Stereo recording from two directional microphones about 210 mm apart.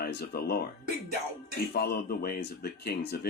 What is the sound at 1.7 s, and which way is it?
Speech, 50° left (ahead or behind).